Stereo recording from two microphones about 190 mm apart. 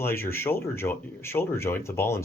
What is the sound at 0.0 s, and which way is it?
Speech, 10° left (ahead or behind).